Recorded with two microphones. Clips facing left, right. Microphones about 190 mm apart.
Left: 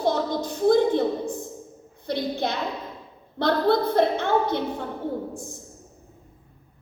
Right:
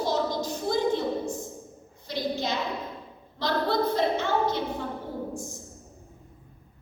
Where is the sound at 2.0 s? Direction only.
55° left (ahead or behind).